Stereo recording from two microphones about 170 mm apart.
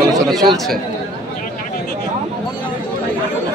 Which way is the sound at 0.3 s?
Centre (ahead or behind).